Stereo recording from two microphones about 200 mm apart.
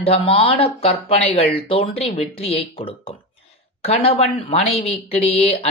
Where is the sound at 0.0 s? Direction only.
25° left (ahead or behind).